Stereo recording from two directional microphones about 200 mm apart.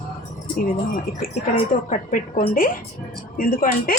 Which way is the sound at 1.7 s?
35° left (ahead or behind).